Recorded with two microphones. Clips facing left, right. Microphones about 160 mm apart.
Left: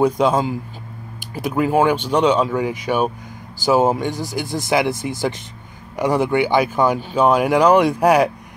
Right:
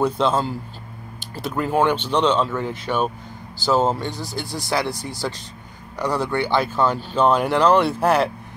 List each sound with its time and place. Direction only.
0.0 s speech: 10° left (ahead or behind)